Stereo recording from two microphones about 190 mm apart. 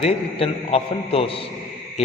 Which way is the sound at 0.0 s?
30° left (ahead or behind).